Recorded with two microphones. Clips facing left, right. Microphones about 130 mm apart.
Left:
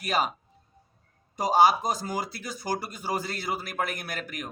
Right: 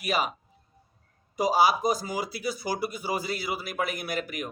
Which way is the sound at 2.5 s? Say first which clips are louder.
Right 1 dB; 45° left (ahead or behind).